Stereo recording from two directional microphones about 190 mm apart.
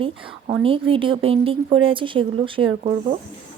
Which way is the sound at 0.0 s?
30° right (ahead or behind).